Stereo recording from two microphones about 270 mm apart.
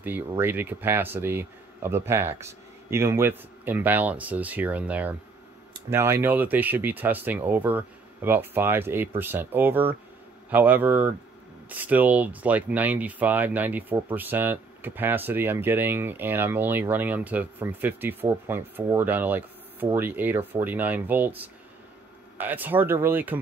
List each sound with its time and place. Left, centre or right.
0.0 s speech: centre